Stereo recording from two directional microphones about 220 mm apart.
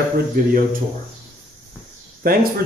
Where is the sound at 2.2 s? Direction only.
45° right (ahead or behind).